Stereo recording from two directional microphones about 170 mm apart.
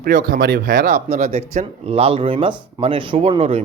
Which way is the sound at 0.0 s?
55° right (ahead or behind).